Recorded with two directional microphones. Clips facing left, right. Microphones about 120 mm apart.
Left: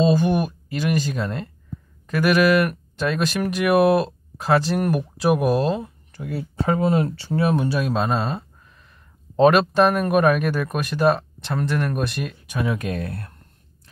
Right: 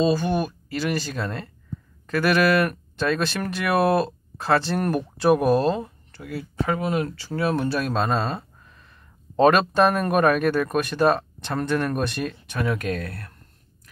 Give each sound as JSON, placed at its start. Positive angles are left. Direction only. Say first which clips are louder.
{"t": 0.0, "sound": "speech", "louder": "left 3 dB", "side_deg": 20}
{"t": 6.2, "sound": "speech", "louder": "left 2 dB", "side_deg": 25}
{"t": 9.4, "sound": "speech", "louder": "left 2 dB", "side_deg": 5}